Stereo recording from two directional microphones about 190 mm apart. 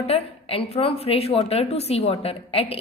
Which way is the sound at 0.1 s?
30° left (ahead or behind).